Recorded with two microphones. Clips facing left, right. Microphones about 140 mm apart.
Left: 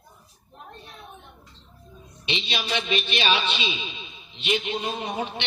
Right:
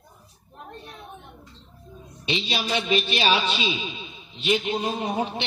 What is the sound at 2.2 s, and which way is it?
A man's voice, 40° right (ahead or behind).